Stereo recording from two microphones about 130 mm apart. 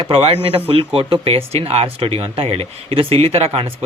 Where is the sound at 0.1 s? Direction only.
50° right (ahead or behind).